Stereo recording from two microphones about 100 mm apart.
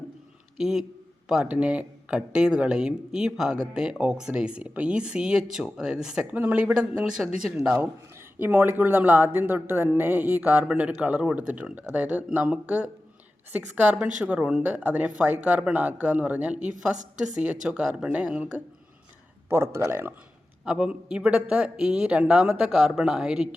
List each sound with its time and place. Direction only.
0.5 s speech: 5° right (ahead or behind)
7.8 s speech: 20° right (ahead or behind)
19.5 s speech: 25° right (ahead or behind)
20.7 s speech: 10° right (ahead or behind)